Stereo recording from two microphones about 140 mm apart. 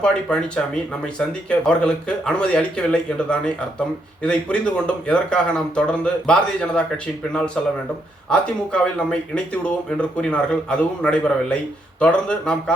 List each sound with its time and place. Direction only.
0.0 s speech: 5° left (ahead or behind)